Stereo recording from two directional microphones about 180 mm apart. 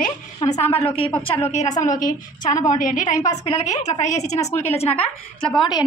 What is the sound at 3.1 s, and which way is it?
Speech, 20° left (ahead or behind).